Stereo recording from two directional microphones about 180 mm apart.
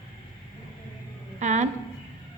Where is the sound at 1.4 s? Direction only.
40° right (ahead or behind).